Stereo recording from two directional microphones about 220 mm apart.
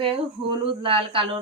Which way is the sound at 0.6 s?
25° right (ahead or behind).